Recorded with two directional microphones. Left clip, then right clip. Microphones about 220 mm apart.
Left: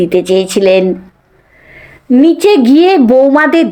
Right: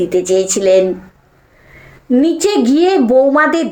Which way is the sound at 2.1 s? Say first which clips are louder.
Left 6 dB; 35° left (ahead or behind).